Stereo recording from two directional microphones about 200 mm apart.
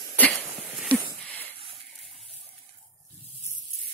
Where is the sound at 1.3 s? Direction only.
10° left (ahead or behind).